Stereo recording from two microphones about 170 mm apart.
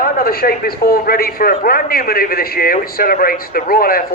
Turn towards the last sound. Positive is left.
turn(degrees=60)  # may be behind; listen again after turning